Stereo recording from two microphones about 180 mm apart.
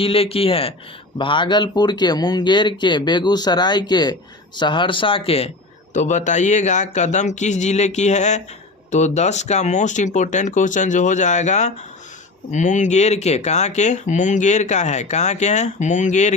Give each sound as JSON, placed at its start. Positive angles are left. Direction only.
{"t": 0.0, "sound": "speech", "side_deg": 30}